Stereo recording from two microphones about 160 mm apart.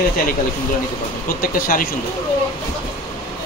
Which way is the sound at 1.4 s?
65° left (ahead or behind).